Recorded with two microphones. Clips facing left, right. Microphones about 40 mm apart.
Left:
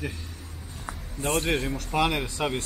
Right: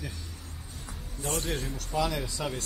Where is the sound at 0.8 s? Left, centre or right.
Left.